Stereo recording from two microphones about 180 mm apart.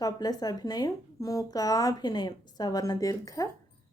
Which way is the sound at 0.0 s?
20° left (ahead or behind).